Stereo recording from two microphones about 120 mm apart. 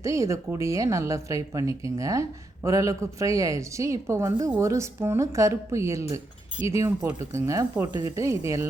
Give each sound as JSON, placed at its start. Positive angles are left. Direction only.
{"t": 0.0, "sound": "a woman's voice", "side_deg": -25}